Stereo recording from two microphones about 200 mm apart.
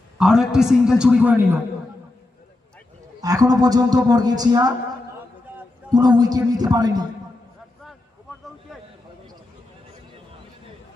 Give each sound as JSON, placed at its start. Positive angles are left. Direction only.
{"t": 0.2, "sound": "a man's voice", "side_deg": -5}
{"t": 3.2, "sound": "speech", "side_deg": -20}
{"t": 5.9, "sound": "speech", "side_deg": -20}